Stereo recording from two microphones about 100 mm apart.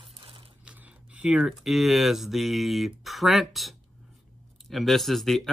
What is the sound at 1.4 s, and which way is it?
Speech, 5° right (ahead or behind).